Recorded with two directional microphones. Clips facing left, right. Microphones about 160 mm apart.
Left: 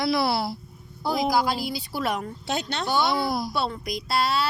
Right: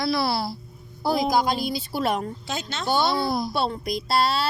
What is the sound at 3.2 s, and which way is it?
Speech, 10° left (ahead or behind).